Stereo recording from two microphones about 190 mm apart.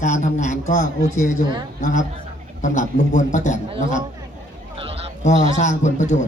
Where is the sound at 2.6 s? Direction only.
40° left (ahead or behind).